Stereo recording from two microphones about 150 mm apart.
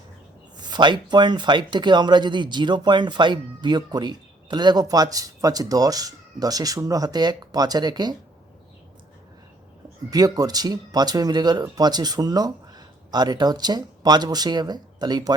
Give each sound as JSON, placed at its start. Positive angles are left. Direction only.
{"t": 0.5, "sound": "speech", "side_deg": -30}
{"t": 10.1, "sound": "speech", "side_deg": -25}